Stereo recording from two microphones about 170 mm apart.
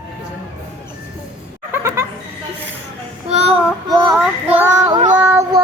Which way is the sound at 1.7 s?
15° right (ahead or behind).